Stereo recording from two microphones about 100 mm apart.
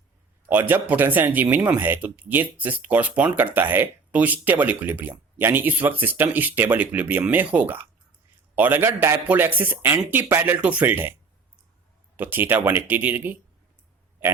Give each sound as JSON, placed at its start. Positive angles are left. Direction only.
{"t": 0.4, "sound": "speech", "side_deg": -20}
{"t": 12.1, "sound": "speech", "side_deg": -20}